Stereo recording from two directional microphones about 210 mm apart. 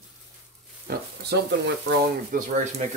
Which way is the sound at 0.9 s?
45° right (ahead or behind).